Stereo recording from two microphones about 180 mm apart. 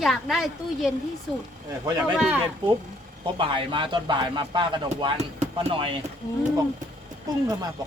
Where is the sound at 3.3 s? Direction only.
25° right (ahead or behind).